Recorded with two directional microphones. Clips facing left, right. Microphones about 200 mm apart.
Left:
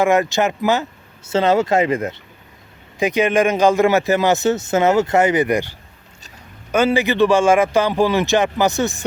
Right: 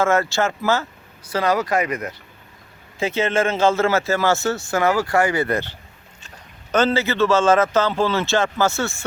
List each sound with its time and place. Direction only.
0.0 s speech: 15° left (ahead or behind)
3.0 s speech: 15° left (ahead or behind)